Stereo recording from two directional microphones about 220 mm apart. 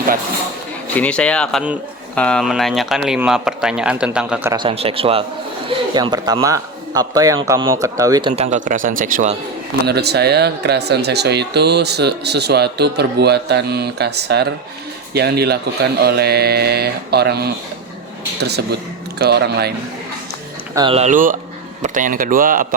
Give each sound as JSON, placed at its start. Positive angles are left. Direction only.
{"t": 0.9, "sound": "a man's voice", "side_deg": 5}
{"t": 4.5, "sound": "speech", "side_deg": -25}
{"t": 8.4, "sound": "speech", "side_deg": -35}
{"t": 19.2, "sound": "speech", "side_deg": -45}
{"t": 20.7, "sound": "speech", "side_deg": -25}